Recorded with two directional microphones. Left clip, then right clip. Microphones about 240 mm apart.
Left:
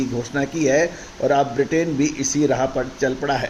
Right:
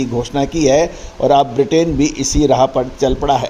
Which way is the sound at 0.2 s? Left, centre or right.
Right.